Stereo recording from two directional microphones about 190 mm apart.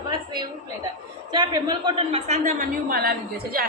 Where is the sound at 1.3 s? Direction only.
25° right (ahead or behind).